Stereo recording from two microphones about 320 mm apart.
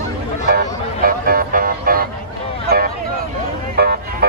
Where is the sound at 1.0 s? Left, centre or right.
Right.